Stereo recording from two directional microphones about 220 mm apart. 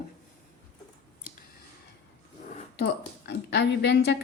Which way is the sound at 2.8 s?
50° left (ahead or behind).